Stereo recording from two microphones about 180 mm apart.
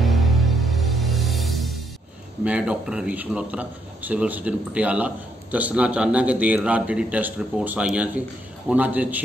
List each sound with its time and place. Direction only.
0.0 s music: centre (ahead or behind)
2.4 s a man's voice: 5° right (ahead or behind)